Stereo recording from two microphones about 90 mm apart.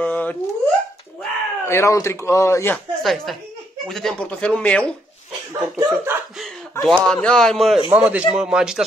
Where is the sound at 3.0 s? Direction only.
Centre (ahead or behind).